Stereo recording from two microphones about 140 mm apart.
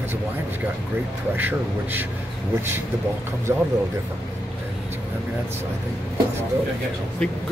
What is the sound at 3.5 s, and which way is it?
Speech, 20° right (ahead or behind).